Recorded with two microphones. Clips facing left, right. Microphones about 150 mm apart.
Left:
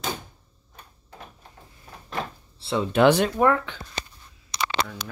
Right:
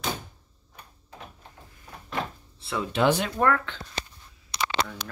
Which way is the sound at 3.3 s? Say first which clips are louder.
Left 3 dB; 15° left (ahead or behind).